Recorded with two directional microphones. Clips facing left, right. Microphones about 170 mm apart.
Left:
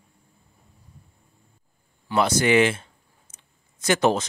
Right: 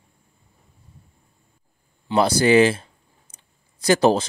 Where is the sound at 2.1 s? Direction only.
35° right (ahead or behind).